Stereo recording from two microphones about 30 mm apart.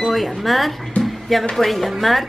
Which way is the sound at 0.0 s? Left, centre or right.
Centre.